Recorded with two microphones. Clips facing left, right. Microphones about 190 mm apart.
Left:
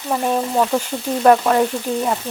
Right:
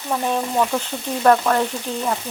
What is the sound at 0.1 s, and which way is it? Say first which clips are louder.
Frying: left 3 dB; 10° left (ahead or behind).